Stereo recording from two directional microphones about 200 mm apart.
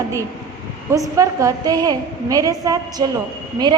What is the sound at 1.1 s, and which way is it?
A woman's voice, 15° right (ahead or behind).